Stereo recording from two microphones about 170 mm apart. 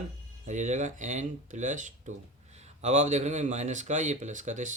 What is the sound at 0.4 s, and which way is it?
Speech, 45° right (ahead or behind).